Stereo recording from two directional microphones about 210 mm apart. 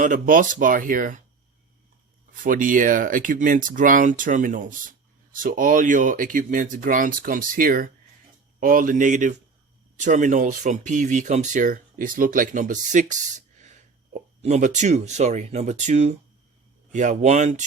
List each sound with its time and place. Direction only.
0.0 s speech: 40° right (ahead or behind)
2.3 s speech: 40° right (ahead or behind)